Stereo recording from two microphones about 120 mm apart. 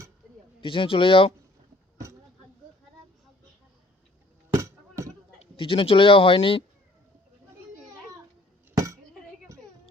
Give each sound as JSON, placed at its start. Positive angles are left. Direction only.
{"t": 0.6, "sound": "speech", "side_deg": 45}
{"t": 4.5, "sound": "basketball bounce", "side_deg": -25}
{"t": 5.5, "sound": "speech", "side_deg": 45}
{"t": 8.7, "sound": "a sound", "side_deg": -30}